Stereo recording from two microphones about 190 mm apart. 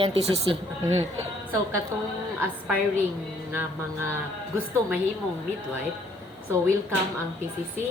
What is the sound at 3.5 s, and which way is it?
Music, 10° right (ahead or behind).